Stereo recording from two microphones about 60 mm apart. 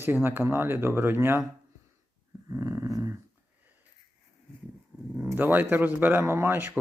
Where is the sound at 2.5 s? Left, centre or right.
Right.